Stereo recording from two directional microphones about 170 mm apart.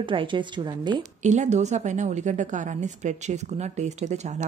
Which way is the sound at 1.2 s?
45° right (ahead or behind).